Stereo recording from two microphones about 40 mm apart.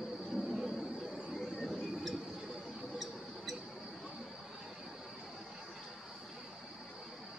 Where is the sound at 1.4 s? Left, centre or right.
Centre.